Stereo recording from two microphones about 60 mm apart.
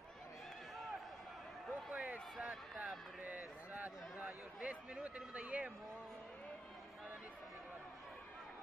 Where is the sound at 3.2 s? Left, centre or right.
Right.